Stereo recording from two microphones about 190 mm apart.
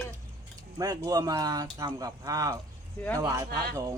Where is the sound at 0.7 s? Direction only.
20° right (ahead or behind).